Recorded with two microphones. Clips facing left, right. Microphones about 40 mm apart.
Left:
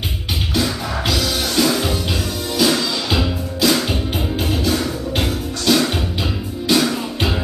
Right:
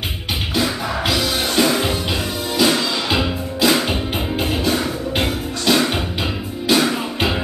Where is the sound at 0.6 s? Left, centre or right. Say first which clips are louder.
Right 1 dB; centre.